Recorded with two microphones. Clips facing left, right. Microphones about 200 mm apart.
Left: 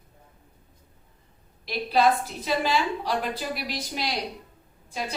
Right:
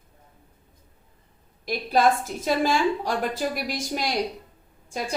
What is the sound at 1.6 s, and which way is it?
A woman's voice, 45° right (ahead or behind).